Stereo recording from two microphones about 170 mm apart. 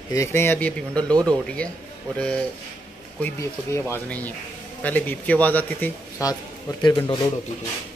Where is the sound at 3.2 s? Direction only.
15° left (ahead or behind).